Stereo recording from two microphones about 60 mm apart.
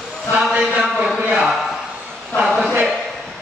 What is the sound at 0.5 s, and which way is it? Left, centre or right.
A man's voice, centre.